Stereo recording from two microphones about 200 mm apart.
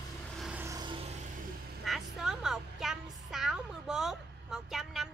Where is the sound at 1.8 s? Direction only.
Centre (ahead or behind).